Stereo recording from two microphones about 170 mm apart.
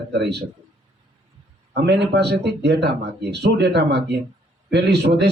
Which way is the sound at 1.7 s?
80° right.